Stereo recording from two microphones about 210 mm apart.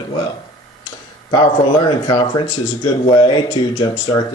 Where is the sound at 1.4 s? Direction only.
20° left (ahead or behind).